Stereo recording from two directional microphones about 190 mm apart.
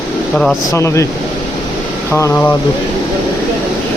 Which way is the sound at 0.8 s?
15° left (ahead or behind).